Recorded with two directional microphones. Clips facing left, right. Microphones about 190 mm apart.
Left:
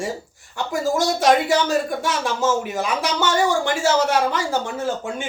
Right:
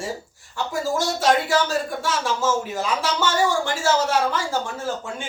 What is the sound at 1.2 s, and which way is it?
Speech, 15° left (ahead or behind).